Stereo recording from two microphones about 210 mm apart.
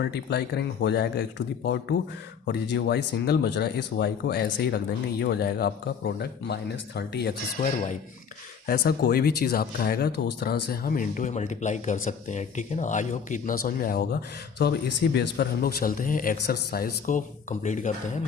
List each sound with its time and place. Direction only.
0.0 s speech: 50° left (ahead or behind)
2.5 s speech: 55° left (ahead or behind); by 18.2 s 35° left (ahead or behind)